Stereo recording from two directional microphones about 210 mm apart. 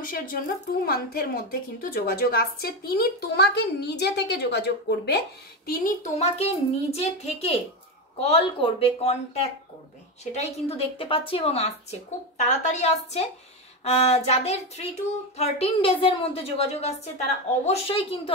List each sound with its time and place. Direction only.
0.0 s a woman's voice: 40° left (ahead or behind)
5.7 s speech: 35° left (ahead or behind)